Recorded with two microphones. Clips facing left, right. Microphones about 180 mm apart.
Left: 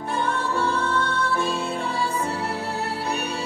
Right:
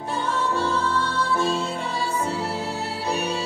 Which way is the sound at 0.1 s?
60° left (ahead or behind).